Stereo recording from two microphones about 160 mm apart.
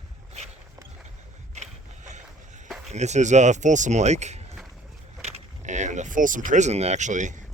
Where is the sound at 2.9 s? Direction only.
45° right (ahead or behind).